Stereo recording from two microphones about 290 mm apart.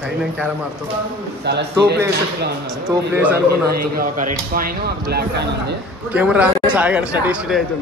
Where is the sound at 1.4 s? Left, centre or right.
Right.